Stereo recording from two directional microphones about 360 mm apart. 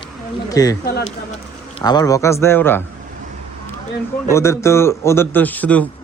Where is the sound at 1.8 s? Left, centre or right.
Centre.